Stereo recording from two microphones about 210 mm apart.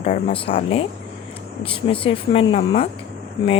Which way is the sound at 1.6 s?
25° left (ahead or behind).